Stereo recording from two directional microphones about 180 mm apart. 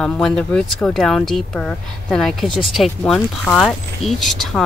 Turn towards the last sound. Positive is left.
turn(degrees=0)  # may be behind; listen again after turning